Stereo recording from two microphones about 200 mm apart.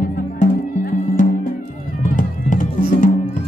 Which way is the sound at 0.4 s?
40° left (ahead or behind).